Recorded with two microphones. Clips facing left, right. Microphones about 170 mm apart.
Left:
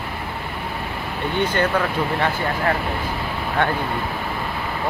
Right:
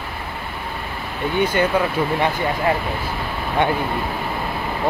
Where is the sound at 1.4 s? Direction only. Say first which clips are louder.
Right 2 dB; 10° right (ahead or behind).